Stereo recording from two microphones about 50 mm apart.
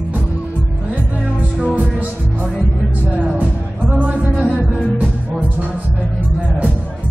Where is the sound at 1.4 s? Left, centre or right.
Right.